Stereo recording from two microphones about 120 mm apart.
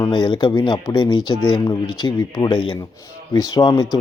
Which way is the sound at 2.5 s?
45° left (ahead or behind).